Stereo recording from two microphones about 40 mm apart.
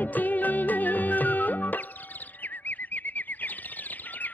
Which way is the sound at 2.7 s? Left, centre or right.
Left.